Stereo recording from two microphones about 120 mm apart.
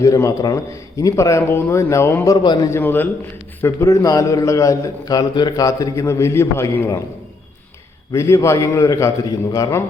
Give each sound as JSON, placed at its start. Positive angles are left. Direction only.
{"t": 0.0, "sound": "a man's voice", "side_deg": 30}
{"t": 2.6, "sound": "a man's voice", "side_deg": 20}
{"t": 8.1, "sound": "a man's voice", "side_deg": 25}